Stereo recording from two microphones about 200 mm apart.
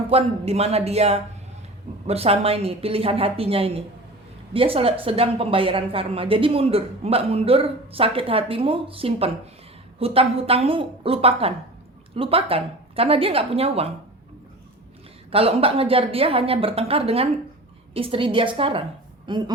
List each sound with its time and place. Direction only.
0.1 s a man's voice: 30° right (ahead or behind)
15.3 s speech: 30° right (ahead or behind)